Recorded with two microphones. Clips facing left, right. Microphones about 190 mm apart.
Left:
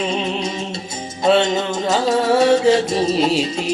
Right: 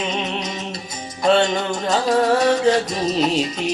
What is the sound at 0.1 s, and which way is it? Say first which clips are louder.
Music: left 3 dB; 30° left (ahead or behind).